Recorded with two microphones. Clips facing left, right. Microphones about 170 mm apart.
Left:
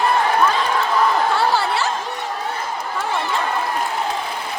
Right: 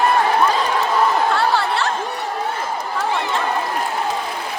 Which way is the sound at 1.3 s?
Centre (ahead or behind).